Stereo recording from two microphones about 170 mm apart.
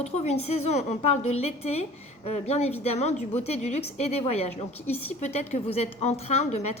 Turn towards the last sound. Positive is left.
turn(degrees=40)  # may be behind; listen again after turning